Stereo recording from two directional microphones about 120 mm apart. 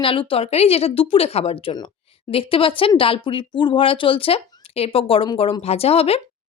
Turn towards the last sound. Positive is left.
turn(degrees=55)  # may be behind; listen again after turning